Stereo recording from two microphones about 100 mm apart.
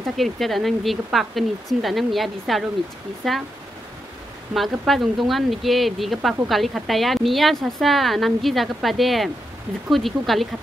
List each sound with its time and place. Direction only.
0.0 s a woman's voice: centre (ahead or behind)
4.6 s a woman's voice: centre (ahead or behind)